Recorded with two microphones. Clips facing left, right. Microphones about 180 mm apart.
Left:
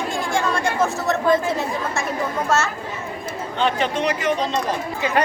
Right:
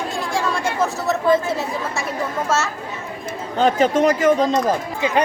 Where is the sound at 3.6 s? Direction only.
40° right (ahead or behind).